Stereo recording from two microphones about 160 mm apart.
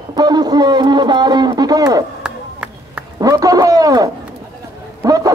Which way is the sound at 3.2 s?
20° right (ahead or behind).